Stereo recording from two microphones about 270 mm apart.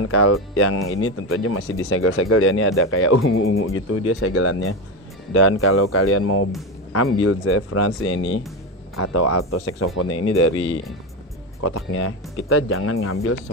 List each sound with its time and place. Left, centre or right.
0.0 s speech: left
11.6 s speech: left